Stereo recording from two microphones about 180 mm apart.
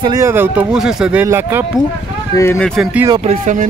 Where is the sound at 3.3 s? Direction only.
45° right (ahead or behind).